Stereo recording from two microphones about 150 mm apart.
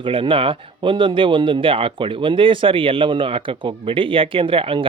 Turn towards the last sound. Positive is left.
turn(degrees=-35)  # may be behind; listen again after turning